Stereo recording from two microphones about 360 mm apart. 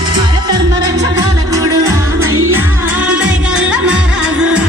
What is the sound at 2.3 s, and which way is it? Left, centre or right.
Music, right.